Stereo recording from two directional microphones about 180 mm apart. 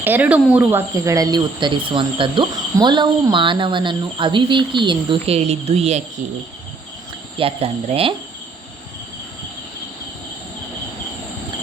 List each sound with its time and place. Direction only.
0.0 s cricket: 10° right (ahead or behind); by 6.0 s 35° right (ahead or behind)
7.3 s speech: 30° right (ahead or behind)